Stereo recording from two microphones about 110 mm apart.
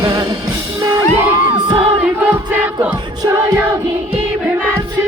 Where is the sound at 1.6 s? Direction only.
50° right (ahead or behind).